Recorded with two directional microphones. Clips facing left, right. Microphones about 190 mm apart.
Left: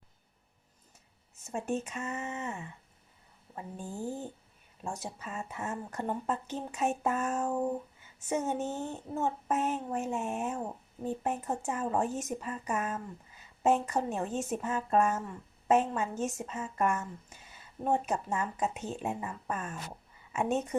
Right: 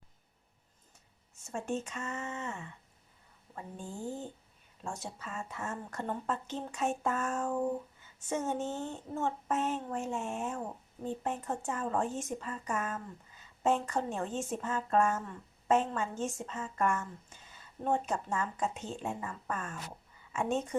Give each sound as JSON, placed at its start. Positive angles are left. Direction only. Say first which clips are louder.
{"t": 1.5, "sound": "a woman's voice", "louder": "left 2 dB", "side_deg": 15}